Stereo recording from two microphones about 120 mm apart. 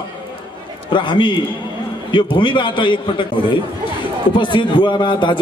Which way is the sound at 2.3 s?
40° left (ahead or behind).